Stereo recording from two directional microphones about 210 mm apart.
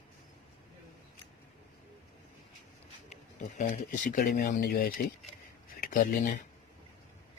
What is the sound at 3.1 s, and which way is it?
Speech, 35° left (ahead or behind).